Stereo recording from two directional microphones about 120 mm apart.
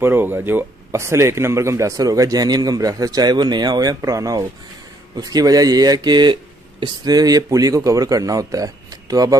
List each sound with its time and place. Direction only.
0.0 s speech: 15° right (ahead or behind)